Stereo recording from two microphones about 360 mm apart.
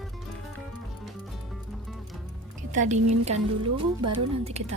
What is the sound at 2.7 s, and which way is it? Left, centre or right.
A woman's voice, centre.